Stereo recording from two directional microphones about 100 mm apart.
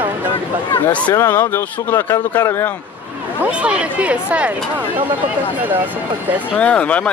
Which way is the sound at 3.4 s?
10° right (ahead or behind).